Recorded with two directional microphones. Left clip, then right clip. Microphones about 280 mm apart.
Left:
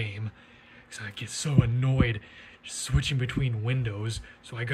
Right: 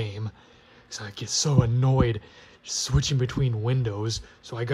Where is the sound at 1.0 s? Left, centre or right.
Centre.